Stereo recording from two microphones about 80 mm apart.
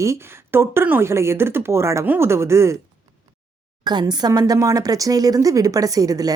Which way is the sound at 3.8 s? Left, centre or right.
Right.